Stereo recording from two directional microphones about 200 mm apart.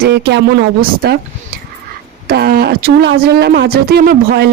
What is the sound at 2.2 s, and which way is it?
Speech, 50° right (ahead or behind).